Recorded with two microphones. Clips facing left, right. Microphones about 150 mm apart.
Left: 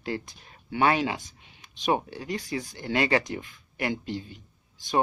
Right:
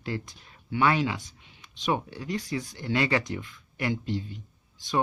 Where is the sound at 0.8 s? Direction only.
15° left (ahead or behind).